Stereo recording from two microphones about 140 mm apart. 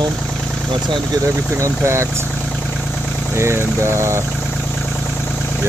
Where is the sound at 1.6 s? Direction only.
20° right (ahead or behind).